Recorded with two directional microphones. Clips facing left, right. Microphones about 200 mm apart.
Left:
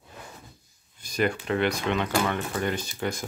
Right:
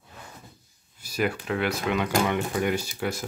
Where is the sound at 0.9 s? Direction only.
5° right (ahead or behind).